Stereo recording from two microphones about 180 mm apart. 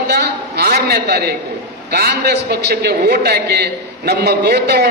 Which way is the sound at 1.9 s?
65° right (ahead or behind).